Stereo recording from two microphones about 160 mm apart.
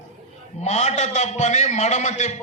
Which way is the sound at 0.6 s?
45° left (ahead or behind).